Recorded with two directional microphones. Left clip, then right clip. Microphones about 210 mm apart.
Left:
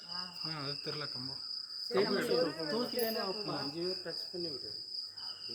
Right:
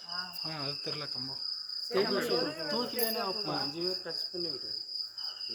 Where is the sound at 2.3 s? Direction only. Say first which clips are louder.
Right 1 dB; 10° right (ahead or behind).